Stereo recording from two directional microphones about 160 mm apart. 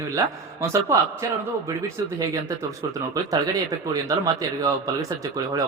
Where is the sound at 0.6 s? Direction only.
15° right (ahead or behind).